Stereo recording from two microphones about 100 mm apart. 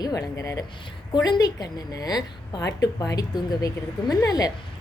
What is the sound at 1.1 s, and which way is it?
A woman's voice, 45° left (ahead or behind).